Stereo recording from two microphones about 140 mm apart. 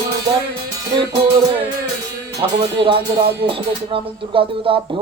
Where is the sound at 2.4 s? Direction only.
35° right (ahead or behind).